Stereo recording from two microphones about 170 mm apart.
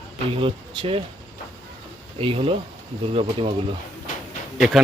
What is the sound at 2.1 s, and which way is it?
Speech, 35° right (ahead or behind).